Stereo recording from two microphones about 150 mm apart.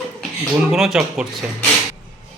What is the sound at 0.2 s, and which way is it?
Speech, centre (ahead or behind).